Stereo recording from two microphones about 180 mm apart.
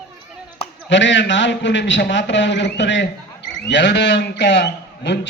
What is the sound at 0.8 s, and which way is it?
A man's voice, 85° left.